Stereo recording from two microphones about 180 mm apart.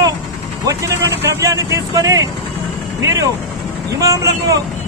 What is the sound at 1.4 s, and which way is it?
Speech, 20° right (ahead or behind).